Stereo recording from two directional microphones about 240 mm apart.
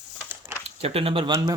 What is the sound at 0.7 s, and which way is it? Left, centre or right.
Speech, right.